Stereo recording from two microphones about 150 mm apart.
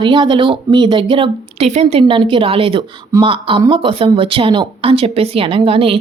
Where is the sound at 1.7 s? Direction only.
50° right (ahead or behind).